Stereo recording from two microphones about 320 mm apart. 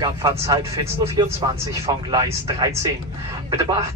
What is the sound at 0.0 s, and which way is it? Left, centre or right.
Speech, centre.